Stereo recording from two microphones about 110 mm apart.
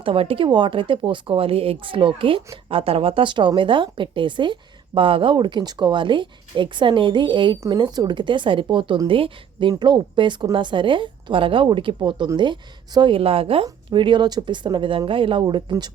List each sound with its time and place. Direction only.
0.0 s speech: 55° right (ahead or behind)
13.9 s speech: 45° right (ahead or behind)